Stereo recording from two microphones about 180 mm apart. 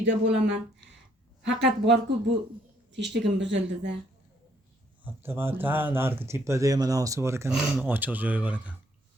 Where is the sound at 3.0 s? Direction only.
80° right.